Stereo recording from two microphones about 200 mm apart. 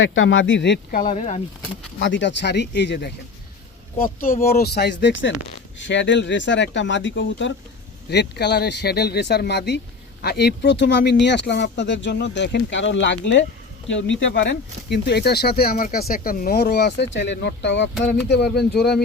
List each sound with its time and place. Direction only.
0.0 s speech: 75° left (ahead or behind); by 1.4 s 35° left (ahead or behind)
2.0 s speech: 65° left (ahead or behind)
3.9 s speech: 45° left (ahead or behind)